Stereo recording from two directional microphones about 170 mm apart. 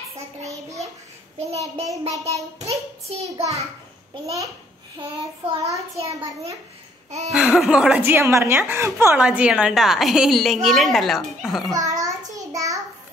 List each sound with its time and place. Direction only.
2.0 s a child's voice: 40° right (ahead or behind)
5.1 s child singing: 25° right (ahead or behind)
5.9 s a child's voice: 35° right (ahead or behind)
7.1 s laughter: 40° right (ahead or behind)
7.3 s a woman's voice: 5° right (ahead or behind)
11.7 s a child's voice: 20° right (ahead or behind)
12.4 s a sound: 20° right (ahead or behind)